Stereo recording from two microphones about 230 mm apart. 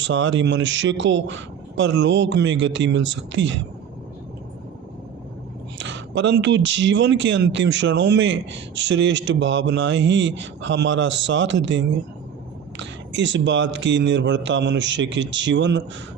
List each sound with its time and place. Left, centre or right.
0.0 s speech: right
5.7 s speech: right
12.8 s speech: right